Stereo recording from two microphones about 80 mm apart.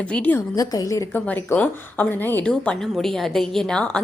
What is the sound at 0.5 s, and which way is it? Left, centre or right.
Speech, left.